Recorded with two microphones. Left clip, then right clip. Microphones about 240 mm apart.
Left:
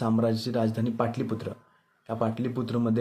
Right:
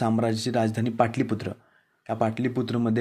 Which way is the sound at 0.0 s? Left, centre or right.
Right.